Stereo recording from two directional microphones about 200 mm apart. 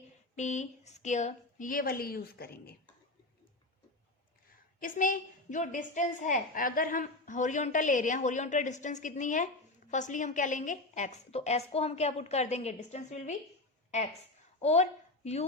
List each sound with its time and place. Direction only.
0.3 s a woman's voice: 35° left (ahead or behind)
4.8 s a woman's voice: 40° left (ahead or behind)
14.6 s a woman's voice: 35° left (ahead or behind)